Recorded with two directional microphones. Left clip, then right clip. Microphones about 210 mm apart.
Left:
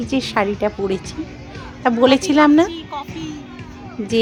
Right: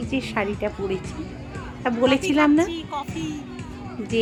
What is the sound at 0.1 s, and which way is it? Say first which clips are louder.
A woman's voice: left 7 dB; 30° left (ahead or behind).